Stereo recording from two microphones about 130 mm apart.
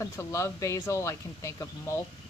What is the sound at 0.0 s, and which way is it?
Speech, 20° left (ahead or behind).